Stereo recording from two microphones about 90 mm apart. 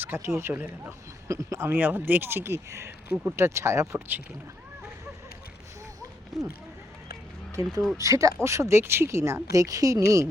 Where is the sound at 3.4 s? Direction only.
30° right (ahead or behind).